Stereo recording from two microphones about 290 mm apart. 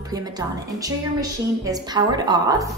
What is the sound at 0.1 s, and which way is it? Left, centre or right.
A woman's voice, centre.